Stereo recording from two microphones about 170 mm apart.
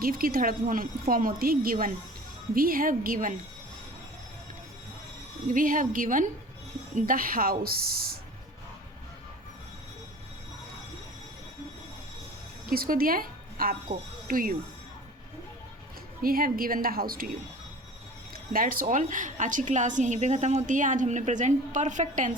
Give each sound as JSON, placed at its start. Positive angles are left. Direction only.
{"t": 0.0, "sound": "a woman's voice", "side_deg": -60}
{"t": 5.5, "sound": "a woman's voice", "side_deg": -50}
{"t": 12.7, "sound": "speech", "side_deg": -60}
{"t": 16.2, "sound": "a woman's voice", "side_deg": -60}
{"t": 18.5, "sound": "a woman's voice", "side_deg": -55}